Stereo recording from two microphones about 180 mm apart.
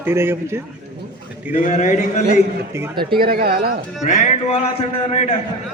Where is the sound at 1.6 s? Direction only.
40° left (ahead or behind).